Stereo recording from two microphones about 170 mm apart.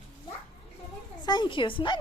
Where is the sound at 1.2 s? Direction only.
25° left (ahead or behind).